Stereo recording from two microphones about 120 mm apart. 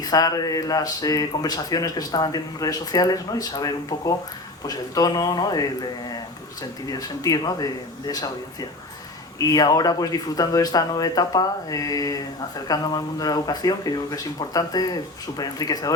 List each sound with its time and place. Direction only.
0.0 s speech: 30° left (ahead or behind)
9.4 s speech: 30° left (ahead or behind)